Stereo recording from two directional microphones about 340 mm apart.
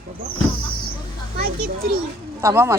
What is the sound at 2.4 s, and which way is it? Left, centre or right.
Speech, centre.